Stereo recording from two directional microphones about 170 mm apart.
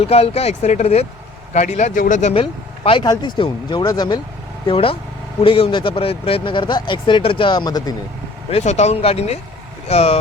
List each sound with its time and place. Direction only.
0.0 s speech: 35° left (ahead or behind)
2.3 s speech: 30° left (ahead or behind)
8.4 s speech: 40° left (ahead or behind)